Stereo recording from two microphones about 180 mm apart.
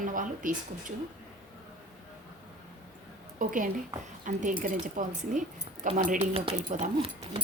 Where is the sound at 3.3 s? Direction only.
45° right (ahead or behind).